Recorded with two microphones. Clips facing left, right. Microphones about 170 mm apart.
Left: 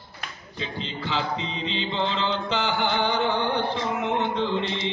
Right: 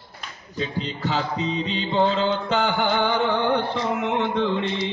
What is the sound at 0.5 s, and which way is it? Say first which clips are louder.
Music: right 5 dB; 45° right (ahead or behind).